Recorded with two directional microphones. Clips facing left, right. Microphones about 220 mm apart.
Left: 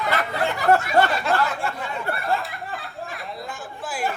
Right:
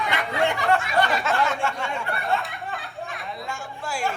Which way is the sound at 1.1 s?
Centre (ahead or behind).